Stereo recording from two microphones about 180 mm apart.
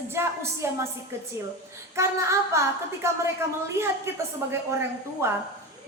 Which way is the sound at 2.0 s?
15° right (ahead or behind).